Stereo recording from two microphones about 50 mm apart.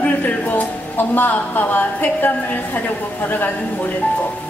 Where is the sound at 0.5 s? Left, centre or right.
Left.